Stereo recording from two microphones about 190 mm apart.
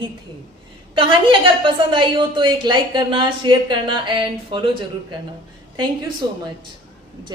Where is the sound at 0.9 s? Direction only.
25° right (ahead or behind).